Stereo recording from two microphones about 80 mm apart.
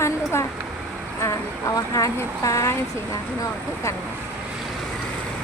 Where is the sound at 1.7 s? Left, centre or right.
Left.